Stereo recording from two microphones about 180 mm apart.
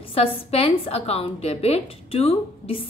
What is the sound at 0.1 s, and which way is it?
A woman's voice, 35° left (ahead or behind).